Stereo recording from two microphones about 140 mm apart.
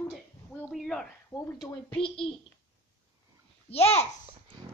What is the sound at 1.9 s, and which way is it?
Speech, 40° left (ahead or behind).